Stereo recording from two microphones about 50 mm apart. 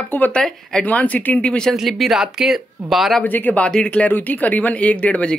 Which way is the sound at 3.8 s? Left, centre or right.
Left.